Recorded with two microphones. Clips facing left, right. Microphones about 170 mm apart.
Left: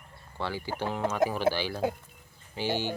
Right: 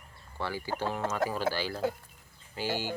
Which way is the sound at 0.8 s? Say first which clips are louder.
Left 4 dB; 15° left (ahead or behind).